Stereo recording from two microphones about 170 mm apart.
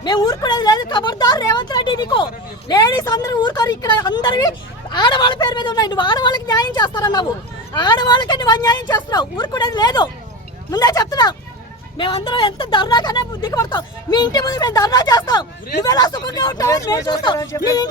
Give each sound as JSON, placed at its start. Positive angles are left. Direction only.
{"t": 0.0, "sound": "speech", "side_deg": 25}